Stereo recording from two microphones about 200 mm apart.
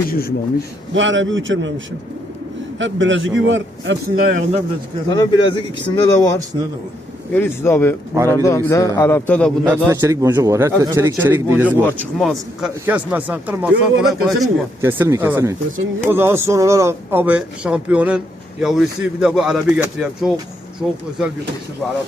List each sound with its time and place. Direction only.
0.1 s a man's voice: 50° left (ahead or behind)
0.9 s a man's voice: 70° right (ahead or behind)
2.7 s a man's voice: 70° right (ahead or behind)
4.2 s speech: 45° right (ahead or behind)
5.0 s speech: 20° left (ahead or behind)
7.3 s a man's voice: 10° left (ahead or behind)
9.6 s a man's voice: 10° right (ahead or behind)
11.8 s a man's voice: 10° left (ahead or behind)
12.2 s a man's voice: centre (ahead or behind)
14.4 s a man's voice: 10° right (ahead or behind)